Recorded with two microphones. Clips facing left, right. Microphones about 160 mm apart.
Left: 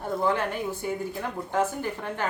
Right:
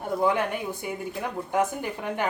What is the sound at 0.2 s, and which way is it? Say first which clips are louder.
A woman's voice: right 2 dB; 15° right (ahead or behind).